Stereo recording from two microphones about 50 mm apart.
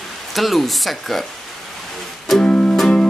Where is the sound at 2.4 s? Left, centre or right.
Centre.